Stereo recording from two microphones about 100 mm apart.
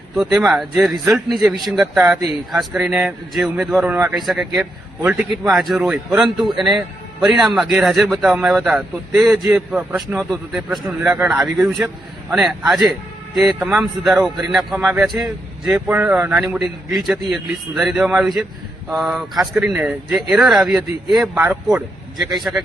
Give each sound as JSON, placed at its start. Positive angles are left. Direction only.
{"t": 0.2, "sound": "a man's voice", "side_deg": -5}
{"t": 10.2, "sound": "a man's voice", "side_deg": 0}
{"t": 15.7, "sound": "speech", "side_deg": -15}
{"t": 16.3, "sound": "a man's voice", "side_deg": -5}